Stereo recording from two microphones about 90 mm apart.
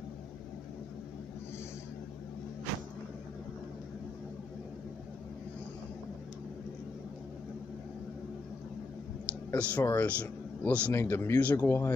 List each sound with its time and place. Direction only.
9.5 s speech: 15° left (ahead or behind)